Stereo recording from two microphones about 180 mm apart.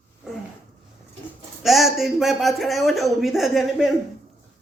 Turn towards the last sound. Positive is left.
turn(degrees=0)  # may be behind; listen again after turning